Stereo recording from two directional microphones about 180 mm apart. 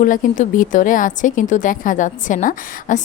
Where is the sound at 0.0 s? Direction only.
45° left (ahead or behind).